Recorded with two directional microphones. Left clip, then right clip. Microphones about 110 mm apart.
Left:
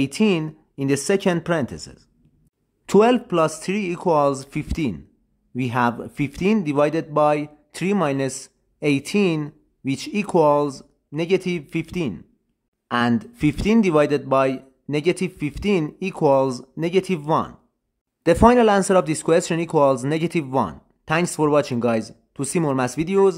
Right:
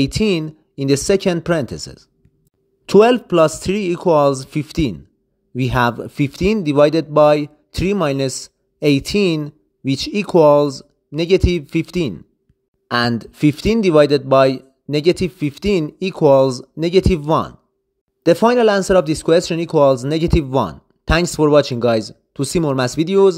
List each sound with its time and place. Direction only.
0.0 s speech: 30° right (ahead or behind)
2.8 s speech: 25° right (ahead or behind)
12.8 s a sound: 40° right (ahead or behind)
13.2 s speech: 30° right (ahead or behind)
18.2 s speech: 20° right (ahead or behind)
20.6 s speech: 45° right (ahead or behind)
21.3 s speech: 30° right (ahead or behind)